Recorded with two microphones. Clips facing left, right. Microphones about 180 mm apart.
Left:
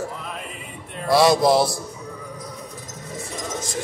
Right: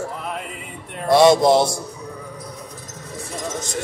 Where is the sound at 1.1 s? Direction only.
Centre (ahead or behind).